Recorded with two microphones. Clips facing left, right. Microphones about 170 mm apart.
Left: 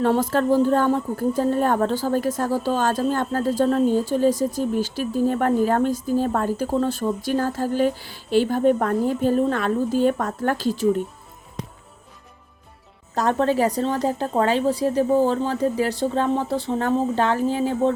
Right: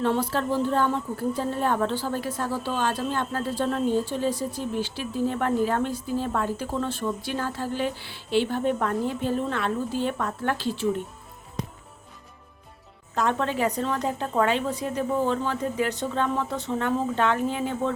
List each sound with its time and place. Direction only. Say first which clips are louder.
0.0 s speech: left 5 dB; 45° left (ahead or behind)
13.1 s a woman's voice: left 5 dB; 35° left (ahead or behind)